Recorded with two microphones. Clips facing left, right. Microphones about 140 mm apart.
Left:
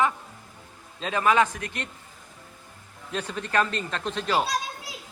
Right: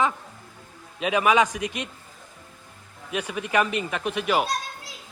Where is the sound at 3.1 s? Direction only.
10° right (ahead or behind).